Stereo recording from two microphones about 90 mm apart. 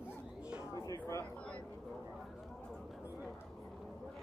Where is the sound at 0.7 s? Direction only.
40° left (ahead or behind).